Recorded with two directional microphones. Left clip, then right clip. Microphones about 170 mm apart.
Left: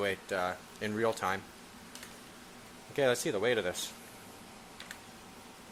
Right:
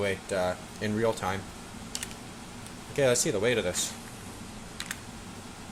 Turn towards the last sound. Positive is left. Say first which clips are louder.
# right 4 dB
turn(degrees=35)  # may be behind; listen again after turning